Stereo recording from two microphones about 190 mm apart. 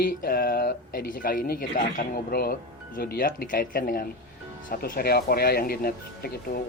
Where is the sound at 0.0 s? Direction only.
50° left (ahead or behind).